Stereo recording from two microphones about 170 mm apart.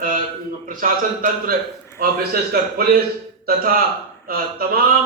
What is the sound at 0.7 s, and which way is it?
Speech, 55° right (ahead or behind).